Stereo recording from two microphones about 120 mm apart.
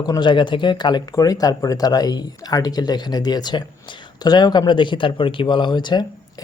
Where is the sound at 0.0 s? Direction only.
35° left (ahead or behind).